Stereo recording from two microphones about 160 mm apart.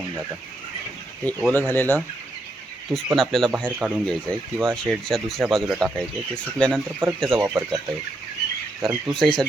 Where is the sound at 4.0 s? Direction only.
5° left (ahead or behind).